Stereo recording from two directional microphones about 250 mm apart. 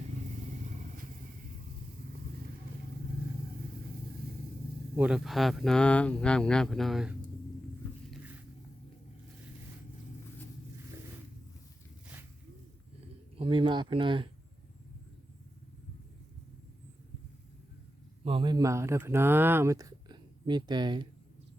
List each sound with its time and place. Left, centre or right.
4.9 s speech: centre
8.1 s a sound: centre
13.3 s speech: right
18.3 s speech: centre